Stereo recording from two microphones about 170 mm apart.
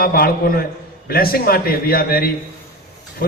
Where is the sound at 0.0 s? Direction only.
60° left (ahead or behind).